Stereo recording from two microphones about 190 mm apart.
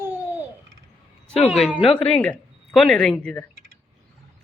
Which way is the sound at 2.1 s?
5° left (ahead or behind).